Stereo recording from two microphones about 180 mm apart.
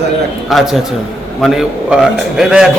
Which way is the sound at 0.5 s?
Centre (ahead or behind).